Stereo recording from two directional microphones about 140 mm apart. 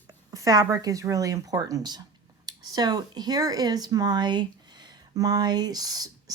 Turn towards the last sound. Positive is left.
turn(degrees=-25)  # may be behind; listen again after turning